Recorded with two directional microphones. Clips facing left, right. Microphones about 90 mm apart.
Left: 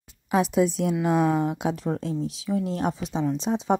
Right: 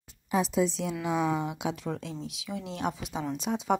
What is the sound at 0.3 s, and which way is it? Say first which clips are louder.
A woman's voice: left 5 dB; 60° left (ahead or behind).